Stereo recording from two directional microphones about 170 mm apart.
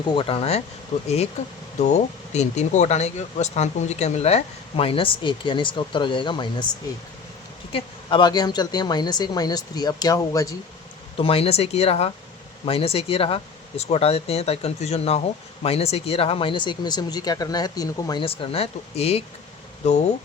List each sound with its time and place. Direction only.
0.1 s speech: 30° left (ahead or behind)
7.7 s a woman's voice: 30° left (ahead or behind)
11.2 s speech: 35° left (ahead or behind)